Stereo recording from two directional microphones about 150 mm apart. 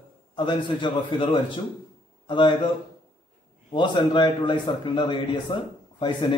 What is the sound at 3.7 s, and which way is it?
A man's voice, 30° left (ahead or behind).